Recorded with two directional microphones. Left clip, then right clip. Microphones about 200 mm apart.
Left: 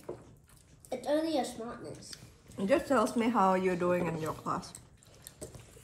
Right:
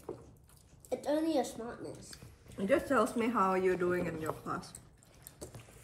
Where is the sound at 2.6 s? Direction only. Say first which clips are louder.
Left 2 dB; 45° left (ahead or behind).